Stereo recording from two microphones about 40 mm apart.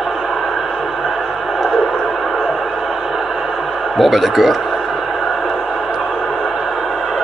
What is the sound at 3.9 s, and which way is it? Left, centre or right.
Speech, centre.